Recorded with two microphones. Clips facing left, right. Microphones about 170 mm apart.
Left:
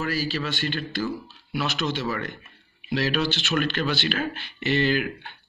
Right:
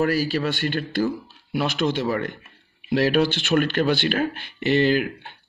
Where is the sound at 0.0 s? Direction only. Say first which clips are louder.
Right 6 dB; 55° right (ahead or behind).